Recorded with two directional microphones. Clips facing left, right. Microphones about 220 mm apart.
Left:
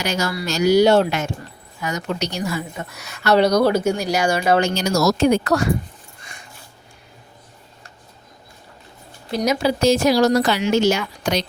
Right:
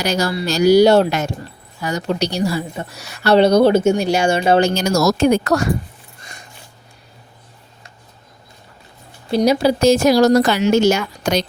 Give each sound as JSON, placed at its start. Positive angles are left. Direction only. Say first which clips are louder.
{"t": 0.0, "sound": "a woman's voice", "louder": "right 4 dB", "side_deg": -35}
{"t": 4.7, "sound": "speech", "louder": "right 2 dB", "side_deg": -45}
{"t": 9.3, "sound": "speech", "louder": "right 5 dB", "side_deg": -30}